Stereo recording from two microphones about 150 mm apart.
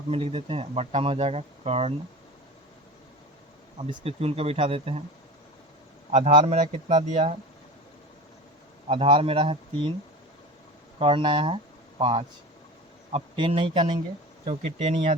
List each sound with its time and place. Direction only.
0.1 s speech: 40° right (ahead or behind)
3.8 s speech: 40° right (ahead or behind)
6.1 s a man's voice: 55° right (ahead or behind)
8.9 s speech: 35° right (ahead or behind)
11.0 s speech: 35° right (ahead or behind)